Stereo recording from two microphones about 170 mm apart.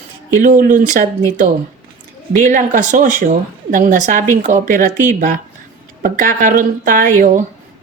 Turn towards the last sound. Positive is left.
turn(degrees=-50)  # may be behind; listen again after turning